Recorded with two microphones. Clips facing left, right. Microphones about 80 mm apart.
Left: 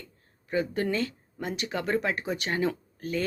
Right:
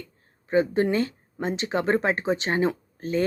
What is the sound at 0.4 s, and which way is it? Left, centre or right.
A woman's voice, right.